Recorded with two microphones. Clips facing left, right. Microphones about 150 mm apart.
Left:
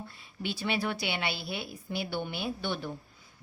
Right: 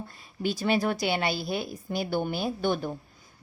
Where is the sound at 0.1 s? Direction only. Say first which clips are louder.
Right 9 dB; 45° right (ahead or behind).